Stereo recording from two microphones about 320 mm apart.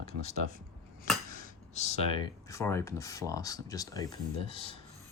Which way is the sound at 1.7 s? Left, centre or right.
Left.